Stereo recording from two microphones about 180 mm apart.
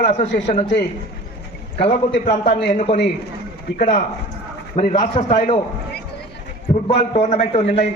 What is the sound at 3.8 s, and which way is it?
Speech, 50° left (ahead or behind).